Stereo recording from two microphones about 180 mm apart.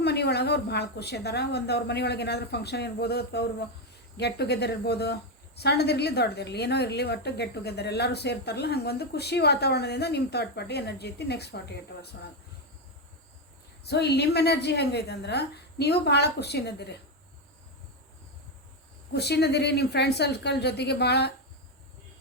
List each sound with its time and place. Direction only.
0.0 s a woman's voice: 65° left (ahead or behind)
13.8 s a woman's voice: 65° left (ahead or behind)
19.1 s a woman's voice: 65° left (ahead or behind)